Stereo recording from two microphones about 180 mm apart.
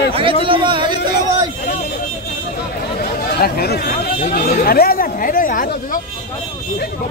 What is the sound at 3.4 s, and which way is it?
Speech, 60° left (ahead or behind).